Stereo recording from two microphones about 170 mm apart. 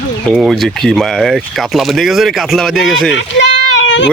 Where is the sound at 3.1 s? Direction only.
90° left.